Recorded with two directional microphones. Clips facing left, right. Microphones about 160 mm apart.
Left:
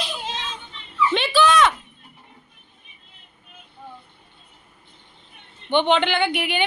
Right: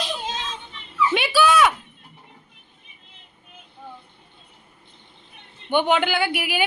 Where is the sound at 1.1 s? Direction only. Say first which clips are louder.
Even; 10° right (ahead or behind).